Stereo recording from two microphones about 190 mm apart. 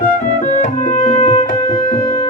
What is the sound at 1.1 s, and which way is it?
Music, 35° left (ahead or behind).